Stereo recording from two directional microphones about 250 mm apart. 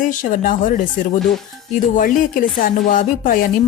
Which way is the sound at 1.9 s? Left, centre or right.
Left.